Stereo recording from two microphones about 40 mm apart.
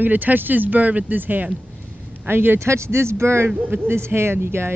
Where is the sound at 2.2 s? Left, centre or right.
Right.